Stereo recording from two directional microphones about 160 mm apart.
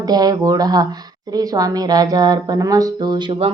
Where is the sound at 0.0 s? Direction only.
25° right (ahead or behind).